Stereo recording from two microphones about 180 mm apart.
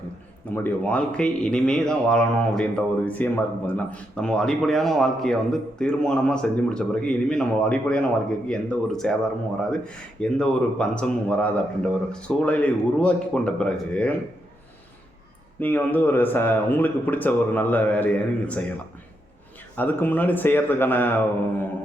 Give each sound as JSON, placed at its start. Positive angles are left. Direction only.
{"t": 0.5, "sound": "speech", "side_deg": 10}
{"t": 15.6, "sound": "speech", "side_deg": 10}
{"t": 19.7, "sound": "speech", "side_deg": 10}